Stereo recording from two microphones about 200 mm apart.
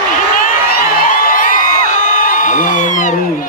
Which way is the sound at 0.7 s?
40° left (ahead or behind).